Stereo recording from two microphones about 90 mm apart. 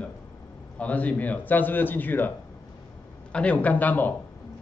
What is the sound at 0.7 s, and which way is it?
A man's voice, 15° left (ahead or behind).